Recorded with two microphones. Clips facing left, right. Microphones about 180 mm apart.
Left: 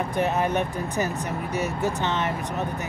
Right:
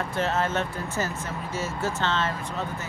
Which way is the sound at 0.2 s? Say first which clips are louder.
Left 2 dB; 15° left (ahead or behind).